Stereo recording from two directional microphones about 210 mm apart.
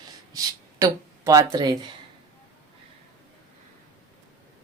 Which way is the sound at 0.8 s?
15° right (ahead or behind).